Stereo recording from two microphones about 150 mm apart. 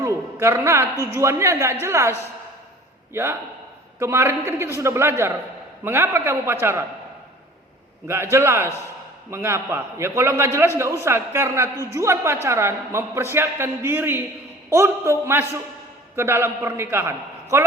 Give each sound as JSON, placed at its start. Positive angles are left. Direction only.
{"t": 0.0, "sound": "a man's voice", "side_deg": -20}
{"t": 8.0, "sound": "a man's voice", "side_deg": -15}